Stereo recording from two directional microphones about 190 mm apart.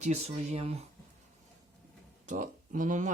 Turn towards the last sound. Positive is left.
turn(degrees=-40)  # may be behind; listen again after turning